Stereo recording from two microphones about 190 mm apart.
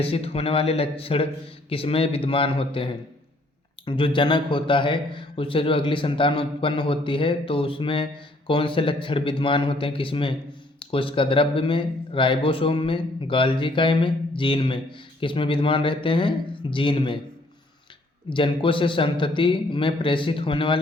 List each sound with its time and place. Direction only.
0.0 s speech: 30° left (ahead or behind)
18.3 s speech: 25° left (ahead or behind)